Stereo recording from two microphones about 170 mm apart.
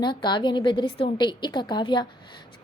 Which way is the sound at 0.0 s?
25° left (ahead or behind).